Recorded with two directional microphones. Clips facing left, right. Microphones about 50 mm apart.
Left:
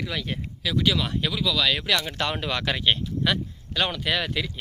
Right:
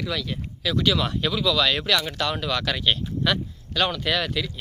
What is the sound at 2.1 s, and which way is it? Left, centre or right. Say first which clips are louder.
Speech: right 1 dB; left.